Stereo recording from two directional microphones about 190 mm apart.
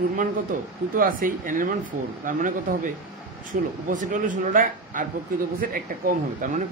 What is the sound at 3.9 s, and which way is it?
Speech, 40° right (ahead or behind).